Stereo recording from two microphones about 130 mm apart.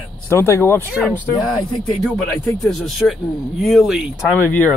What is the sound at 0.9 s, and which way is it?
Speech, 5° right (ahead or behind).